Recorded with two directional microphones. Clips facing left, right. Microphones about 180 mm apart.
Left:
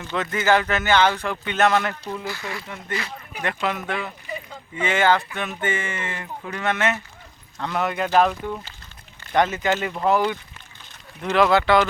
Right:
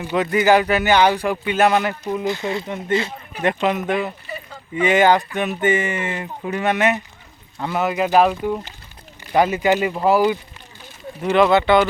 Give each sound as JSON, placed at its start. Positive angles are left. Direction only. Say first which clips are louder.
{"t": 0.0, "sound": "speech", "louder": "right 6 dB", "side_deg": -15}
{"t": 7.6, "sound": "speech", "louder": "right 4 dB", "side_deg": -5}